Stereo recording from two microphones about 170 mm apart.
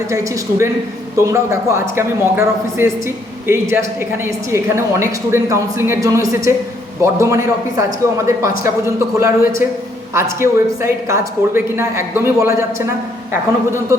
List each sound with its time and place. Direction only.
0.1 s a man's voice: 20° right (ahead or behind)